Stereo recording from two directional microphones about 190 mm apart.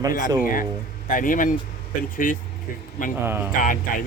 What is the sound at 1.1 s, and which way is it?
Speech, 45° left (ahead or behind).